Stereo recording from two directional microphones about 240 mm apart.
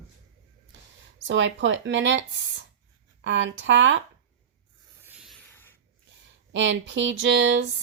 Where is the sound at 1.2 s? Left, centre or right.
Right.